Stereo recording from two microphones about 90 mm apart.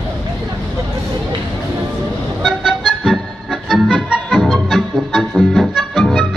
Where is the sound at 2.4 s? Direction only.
5° right (ahead or behind).